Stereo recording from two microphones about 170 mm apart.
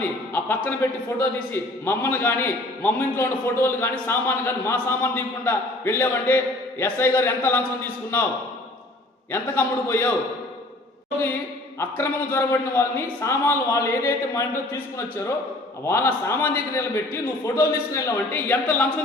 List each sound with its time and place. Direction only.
0.0 s a man's voice: 10° left (ahead or behind)
9.3 s a man's voice: 15° left (ahead or behind)
11.8 s a man's voice: 15° left (ahead or behind)